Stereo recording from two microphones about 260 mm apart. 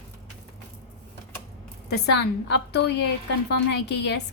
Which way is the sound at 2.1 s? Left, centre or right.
Left.